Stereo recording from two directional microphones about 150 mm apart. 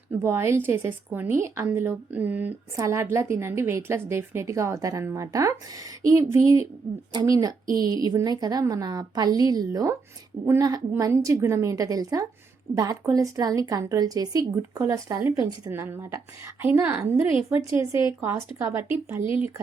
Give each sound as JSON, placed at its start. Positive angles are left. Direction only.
{"t": 0.2, "sound": "a woman's voice", "side_deg": -15}